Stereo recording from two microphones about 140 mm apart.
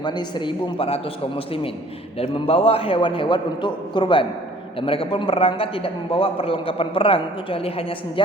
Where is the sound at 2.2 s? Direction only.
45° left (ahead or behind).